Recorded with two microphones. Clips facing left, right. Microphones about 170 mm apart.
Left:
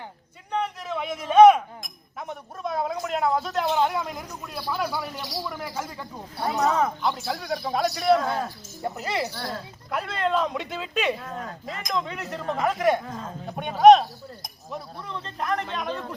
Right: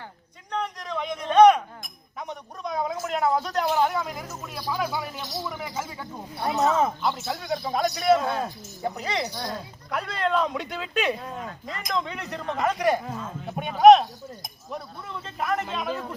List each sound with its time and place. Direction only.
0.5 s a sound: 5° left (ahead or behind)
3.8 s speech: centre (ahead or behind)
5.2 s speech: 20° right (ahead or behind)
5.7 s speech: 5° right (ahead or behind)
6.6 s speech: 20° right (ahead or behind)
7.0 s speech: centre (ahead or behind)
8.2 s speech: 20° right (ahead or behind)
8.8 s speech: 5° left (ahead or behind)
9.3 s speech: 15° right (ahead or behind)
9.9 s speech: centre (ahead or behind)